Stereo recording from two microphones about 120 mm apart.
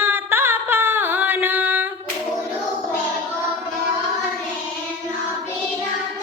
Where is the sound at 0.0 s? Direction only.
20° right (ahead or behind).